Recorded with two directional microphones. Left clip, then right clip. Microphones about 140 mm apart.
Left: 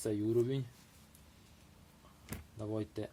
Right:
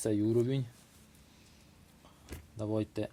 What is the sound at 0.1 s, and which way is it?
Speech, 90° right.